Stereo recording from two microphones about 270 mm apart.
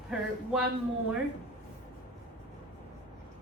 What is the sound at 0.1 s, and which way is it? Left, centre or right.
Speech, centre.